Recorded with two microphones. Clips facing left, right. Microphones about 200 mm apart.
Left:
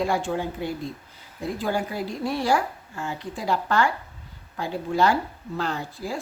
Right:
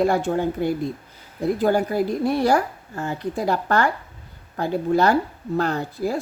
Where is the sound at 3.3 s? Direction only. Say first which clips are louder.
Right 2 dB; 55° right (ahead or behind).